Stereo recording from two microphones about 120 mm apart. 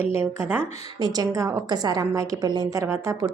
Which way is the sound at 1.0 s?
35° right (ahead or behind).